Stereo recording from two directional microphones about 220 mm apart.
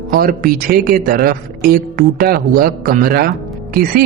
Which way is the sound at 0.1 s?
40° right (ahead or behind).